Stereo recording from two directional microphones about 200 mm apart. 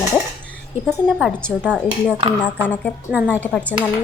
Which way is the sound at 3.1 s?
10° right (ahead or behind).